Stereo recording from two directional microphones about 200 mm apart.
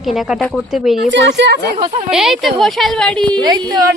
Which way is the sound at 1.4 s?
60° right (ahead or behind).